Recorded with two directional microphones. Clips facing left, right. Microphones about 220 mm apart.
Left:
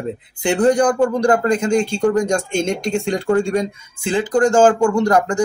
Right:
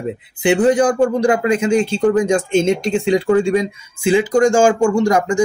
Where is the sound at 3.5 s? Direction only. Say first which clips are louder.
Right 3 dB; 5° right (ahead or behind).